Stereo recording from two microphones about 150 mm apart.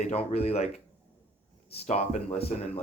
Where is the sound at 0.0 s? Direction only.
45° left (ahead or behind).